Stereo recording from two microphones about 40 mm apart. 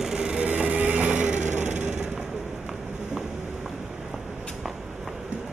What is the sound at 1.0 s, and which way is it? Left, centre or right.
Vehicle, right.